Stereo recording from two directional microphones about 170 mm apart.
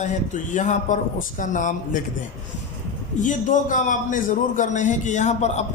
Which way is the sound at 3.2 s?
50° left (ahead or behind).